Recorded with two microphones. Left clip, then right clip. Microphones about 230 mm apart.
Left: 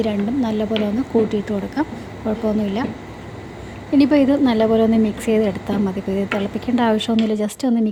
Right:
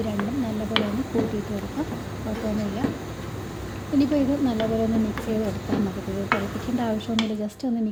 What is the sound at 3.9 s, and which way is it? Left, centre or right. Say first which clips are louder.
A woman's voice: left 8 dB; left.